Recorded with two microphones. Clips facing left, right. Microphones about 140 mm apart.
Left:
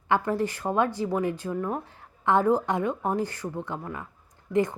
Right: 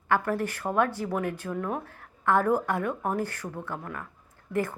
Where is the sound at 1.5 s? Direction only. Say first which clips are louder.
Left 2 dB; centre (ahead or behind).